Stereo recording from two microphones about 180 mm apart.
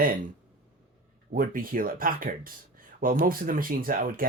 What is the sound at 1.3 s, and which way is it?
Speech, 50° right (ahead or behind).